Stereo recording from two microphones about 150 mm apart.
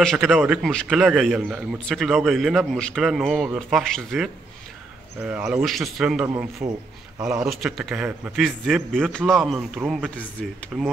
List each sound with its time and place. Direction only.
0.0 s a man's voice: centre (ahead or behind)
6.6 s a man's voice: 20° right (ahead or behind)
7.2 s a man's voice: 5° right (ahead or behind)